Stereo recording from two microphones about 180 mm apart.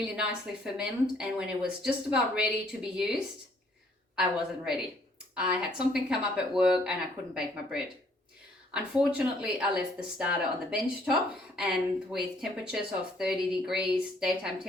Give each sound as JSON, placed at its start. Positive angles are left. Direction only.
{"t": 0.0, "sound": "speech", "side_deg": -5}
{"t": 8.7, "sound": "speech", "side_deg": -5}